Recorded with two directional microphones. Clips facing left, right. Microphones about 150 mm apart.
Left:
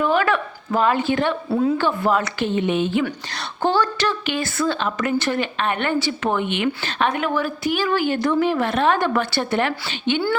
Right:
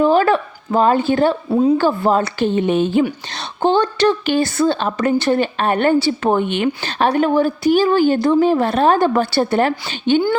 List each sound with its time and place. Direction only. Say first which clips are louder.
0.0 s a woman's voice: right 6 dB; 35° right (ahead or behind)
1.5 s a woman's voice: right 4 dB; 20° right (ahead or behind)
1.8 s a woman's voice: right 4 dB; 30° right (ahead or behind)
3.0 s a woman's voice: right 6 dB; 20° right (ahead or behind); by 10.2 s 40° right (ahead or behind)